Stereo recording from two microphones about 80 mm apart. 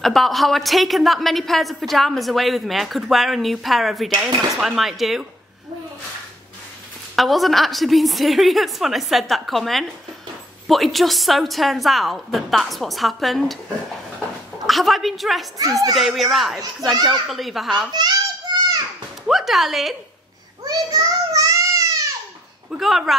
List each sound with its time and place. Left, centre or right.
0.0 s a woman's voice: centre
7.2 s a woman's voice: centre
14.7 s a woman's voice: centre
17.9 s children playing: right
19.2 s a woman's voice: centre
20.6 s child singing: right
22.7 s a woman's voice: centre